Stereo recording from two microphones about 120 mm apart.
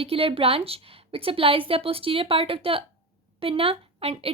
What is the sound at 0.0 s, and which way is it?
A woman's voice, 50° right (ahead or behind).